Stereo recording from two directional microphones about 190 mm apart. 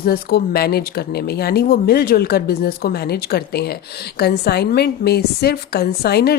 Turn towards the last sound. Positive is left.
turn(degrees=55)  # may be behind; listen again after turning